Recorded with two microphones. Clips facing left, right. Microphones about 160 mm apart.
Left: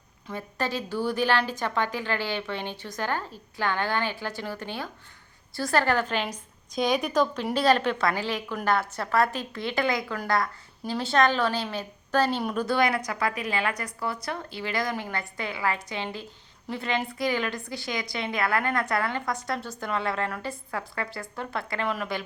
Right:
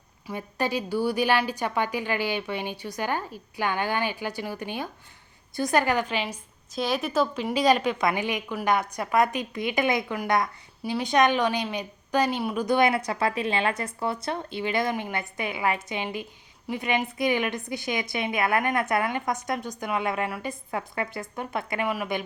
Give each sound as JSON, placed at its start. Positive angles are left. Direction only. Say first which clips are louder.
{"t": 0.3, "sound": "a woman's voice", "louder": "right 2 dB", "side_deg": -15}
{"t": 12.6, "sound": "a woman's voice", "louder": "right 4 dB", "side_deg": -20}